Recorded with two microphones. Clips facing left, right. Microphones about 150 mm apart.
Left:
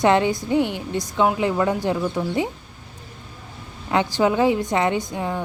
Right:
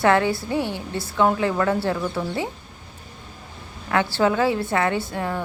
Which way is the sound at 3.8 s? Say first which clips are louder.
Left 1 dB; 15° left (ahead or behind).